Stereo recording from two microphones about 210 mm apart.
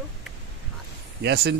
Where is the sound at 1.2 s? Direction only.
55° right (ahead or behind).